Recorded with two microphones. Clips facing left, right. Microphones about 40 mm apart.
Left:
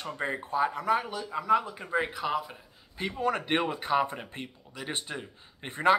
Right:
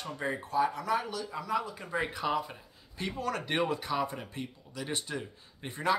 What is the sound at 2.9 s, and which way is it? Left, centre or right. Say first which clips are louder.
Speech: left 4 dB; centre.